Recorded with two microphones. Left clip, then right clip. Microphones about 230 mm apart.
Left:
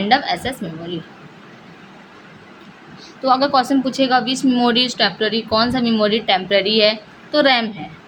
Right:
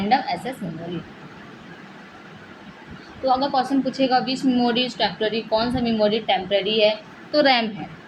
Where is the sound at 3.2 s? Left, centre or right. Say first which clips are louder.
Left 5 dB; left; by 7.7 s centre.